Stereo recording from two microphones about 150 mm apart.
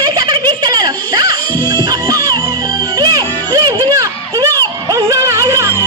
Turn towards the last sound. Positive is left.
turn(degrees=-20)  # may be behind; listen again after turning